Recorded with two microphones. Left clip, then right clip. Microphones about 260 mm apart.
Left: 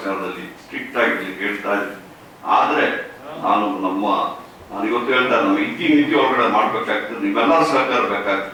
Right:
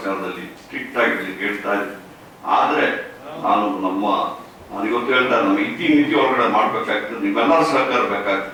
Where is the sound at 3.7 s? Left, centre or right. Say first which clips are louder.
Even; left.